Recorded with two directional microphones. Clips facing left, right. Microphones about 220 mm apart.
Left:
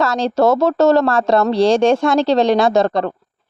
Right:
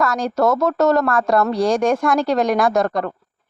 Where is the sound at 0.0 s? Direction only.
25° left (ahead or behind).